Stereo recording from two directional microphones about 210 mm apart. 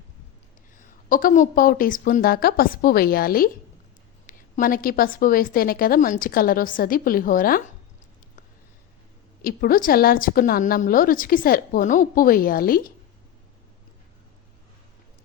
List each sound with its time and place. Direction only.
0.8 s a woman's voice: 40° left (ahead or behind)
9.4 s a woman's voice: 45° left (ahead or behind)